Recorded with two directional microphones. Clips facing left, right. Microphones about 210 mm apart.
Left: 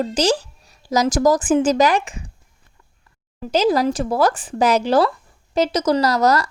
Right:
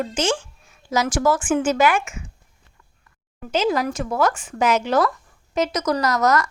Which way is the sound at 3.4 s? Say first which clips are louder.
Left 4 dB; 35° left (ahead or behind).